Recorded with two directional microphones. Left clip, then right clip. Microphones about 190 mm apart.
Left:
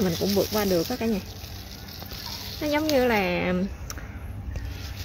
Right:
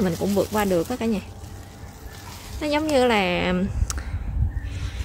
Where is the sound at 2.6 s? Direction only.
10° right (ahead or behind).